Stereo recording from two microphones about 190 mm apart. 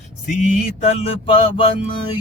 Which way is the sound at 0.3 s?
35° left (ahead or behind).